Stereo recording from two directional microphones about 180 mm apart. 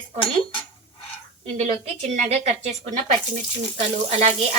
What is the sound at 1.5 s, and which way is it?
Frying, 35° right (ahead or behind).